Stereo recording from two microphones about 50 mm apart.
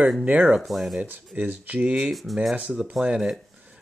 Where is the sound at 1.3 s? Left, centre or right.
Right.